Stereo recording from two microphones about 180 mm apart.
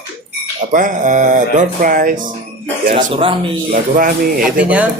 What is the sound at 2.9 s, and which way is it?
Speech, 30° right (ahead or behind).